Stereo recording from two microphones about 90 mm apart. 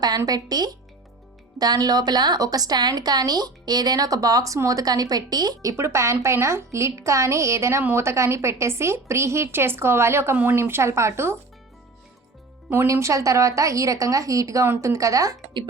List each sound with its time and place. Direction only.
0.3 s a woman's voice: 50° right (ahead or behind)
5.7 s a woman's voice: 30° right (ahead or behind)
12.7 s a woman's voice: 30° right (ahead or behind)